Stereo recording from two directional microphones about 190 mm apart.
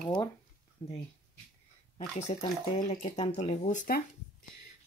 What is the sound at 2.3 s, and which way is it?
Speech, 40° left (ahead or behind).